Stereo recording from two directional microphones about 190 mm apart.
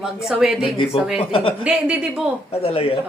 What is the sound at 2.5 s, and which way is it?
Speech, 30° left (ahead or behind).